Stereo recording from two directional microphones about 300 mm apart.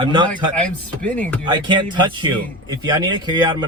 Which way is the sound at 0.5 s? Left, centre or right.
Centre.